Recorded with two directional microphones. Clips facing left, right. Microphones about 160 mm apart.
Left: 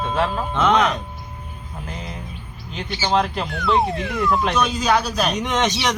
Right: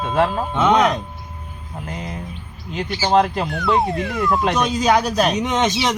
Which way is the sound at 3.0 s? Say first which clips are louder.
Right 4 dB; 40° right (ahead or behind).